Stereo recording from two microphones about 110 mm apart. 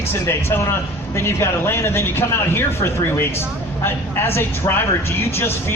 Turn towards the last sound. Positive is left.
turn(degrees=20)  # may be behind; listen again after turning